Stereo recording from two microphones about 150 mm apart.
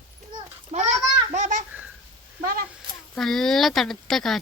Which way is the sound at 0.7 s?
50° right (ahead or behind).